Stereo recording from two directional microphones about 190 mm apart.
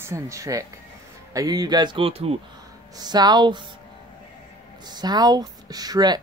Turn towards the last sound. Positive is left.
turn(degrees=-20)  # may be behind; listen again after turning